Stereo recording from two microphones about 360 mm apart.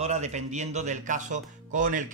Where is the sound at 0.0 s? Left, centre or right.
Centre.